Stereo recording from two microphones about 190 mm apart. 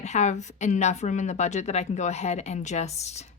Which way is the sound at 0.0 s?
35° left (ahead or behind).